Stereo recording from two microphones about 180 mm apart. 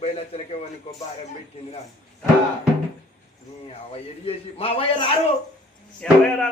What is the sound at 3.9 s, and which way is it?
A man's voice, 30° left (ahead or behind).